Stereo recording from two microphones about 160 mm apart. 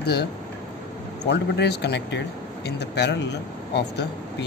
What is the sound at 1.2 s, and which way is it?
Speech, 90° left.